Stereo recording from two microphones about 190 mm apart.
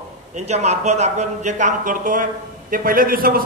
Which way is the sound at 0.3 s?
35° right (ahead or behind).